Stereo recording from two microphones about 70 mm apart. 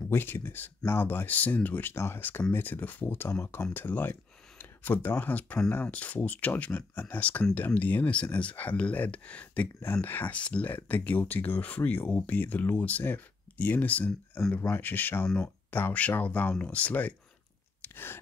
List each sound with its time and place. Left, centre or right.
0.1 s speech: left
17.8 s chewing: left